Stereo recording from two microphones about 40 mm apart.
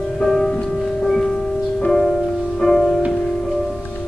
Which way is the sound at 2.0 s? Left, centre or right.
Centre.